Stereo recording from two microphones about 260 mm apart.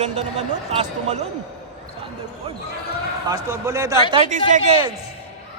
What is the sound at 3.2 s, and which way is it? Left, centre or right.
Speech, centre.